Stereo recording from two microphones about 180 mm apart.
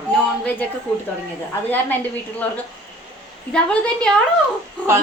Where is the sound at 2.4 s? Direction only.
10° left (ahead or behind).